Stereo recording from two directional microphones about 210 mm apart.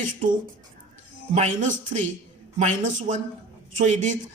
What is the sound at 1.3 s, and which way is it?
Speech, 35° right (ahead or behind).